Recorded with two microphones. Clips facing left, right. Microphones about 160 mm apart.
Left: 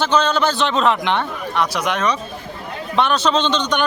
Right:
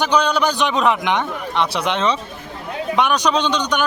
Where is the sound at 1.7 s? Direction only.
25° right (ahead or behind).